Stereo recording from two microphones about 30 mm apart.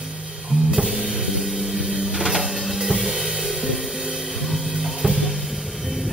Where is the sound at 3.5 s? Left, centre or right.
Centre.